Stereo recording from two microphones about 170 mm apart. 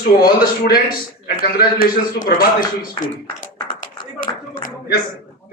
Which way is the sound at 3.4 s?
50° left (ahead or behind).